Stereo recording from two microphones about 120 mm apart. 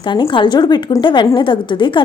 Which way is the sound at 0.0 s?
40° left (ahead or behind).